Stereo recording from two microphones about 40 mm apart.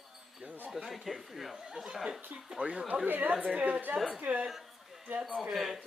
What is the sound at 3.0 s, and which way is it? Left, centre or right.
Speech, right.